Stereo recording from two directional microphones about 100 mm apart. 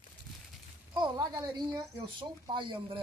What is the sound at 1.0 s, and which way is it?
Speech, 40° right (ahead or behind).